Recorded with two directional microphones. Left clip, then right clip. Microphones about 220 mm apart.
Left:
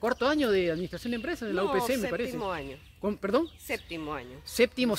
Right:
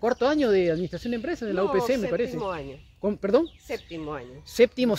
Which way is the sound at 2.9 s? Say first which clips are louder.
Right 5 dB; 15° right (ahead or behind).